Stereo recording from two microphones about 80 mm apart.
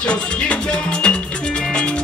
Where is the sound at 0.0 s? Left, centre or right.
Centre.